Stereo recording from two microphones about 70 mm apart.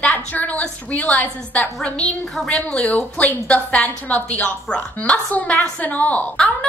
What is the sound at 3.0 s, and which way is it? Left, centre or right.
A woman's voice, left.